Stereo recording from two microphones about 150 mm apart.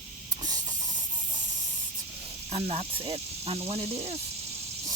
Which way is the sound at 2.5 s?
45° right (ahead or behind).